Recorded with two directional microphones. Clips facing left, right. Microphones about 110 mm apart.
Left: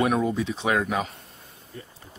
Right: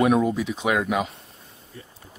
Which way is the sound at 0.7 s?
15° right (ahead or behind).